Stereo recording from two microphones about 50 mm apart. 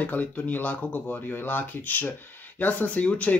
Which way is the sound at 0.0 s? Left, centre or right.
Left.